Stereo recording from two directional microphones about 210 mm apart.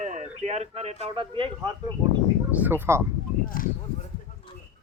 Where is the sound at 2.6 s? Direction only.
10° right (ahead or behind).